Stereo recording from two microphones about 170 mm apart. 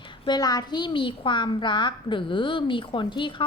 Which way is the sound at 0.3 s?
25° left (ahead or behind).